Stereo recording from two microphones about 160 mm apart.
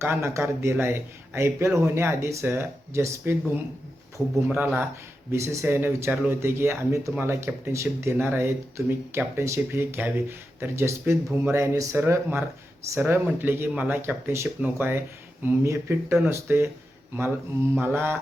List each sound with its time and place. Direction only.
0.0 s speech: 15° right (ahead or behind)
17.7 s speech: 15° right (ahead or behind)